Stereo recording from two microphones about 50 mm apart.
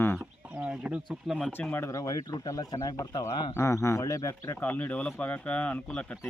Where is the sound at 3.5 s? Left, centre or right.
Left.